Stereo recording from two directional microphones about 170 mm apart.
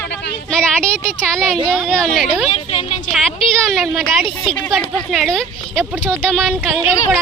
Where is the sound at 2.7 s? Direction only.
40° left (ahead or behind).